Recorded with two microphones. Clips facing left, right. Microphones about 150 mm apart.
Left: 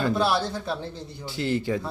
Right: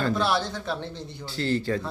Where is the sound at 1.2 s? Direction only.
20° left (ahead or behind).